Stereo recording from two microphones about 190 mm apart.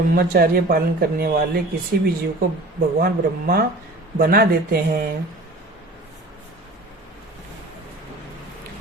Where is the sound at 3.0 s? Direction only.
50° right (ahead or behind).